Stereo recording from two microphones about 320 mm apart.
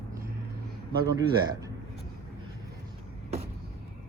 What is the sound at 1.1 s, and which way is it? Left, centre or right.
Speech, centre.